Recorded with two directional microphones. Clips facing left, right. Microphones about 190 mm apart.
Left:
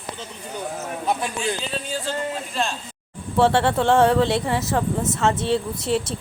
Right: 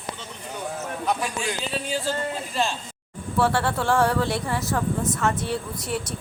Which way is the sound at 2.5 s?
Centre (ahead or behind).